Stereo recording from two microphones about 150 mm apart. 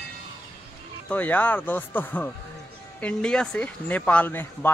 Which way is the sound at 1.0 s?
10° left (ahead or behind).